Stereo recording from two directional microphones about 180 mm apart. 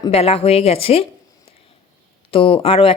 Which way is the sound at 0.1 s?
35° left (ahead or behind).